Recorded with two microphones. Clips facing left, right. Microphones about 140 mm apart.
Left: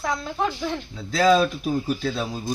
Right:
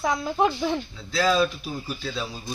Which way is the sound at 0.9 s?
45° left (ahead or behind).